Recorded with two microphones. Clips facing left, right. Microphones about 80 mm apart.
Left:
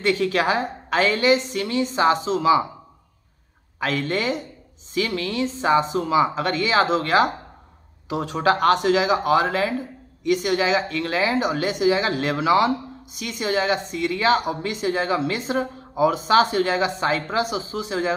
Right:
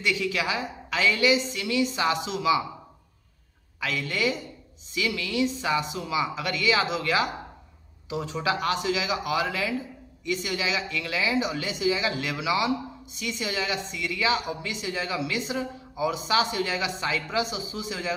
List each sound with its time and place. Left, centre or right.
0.0 s speech: left
3.8 s speech: left